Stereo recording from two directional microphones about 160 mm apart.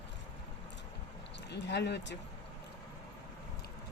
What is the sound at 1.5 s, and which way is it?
Speech, 90° left.